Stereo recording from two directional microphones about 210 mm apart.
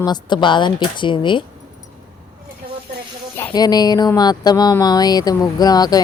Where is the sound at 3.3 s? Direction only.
20° left (ahead or behind).